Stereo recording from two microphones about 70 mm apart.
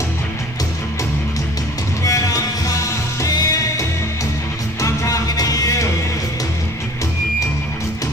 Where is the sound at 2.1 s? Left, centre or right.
Left.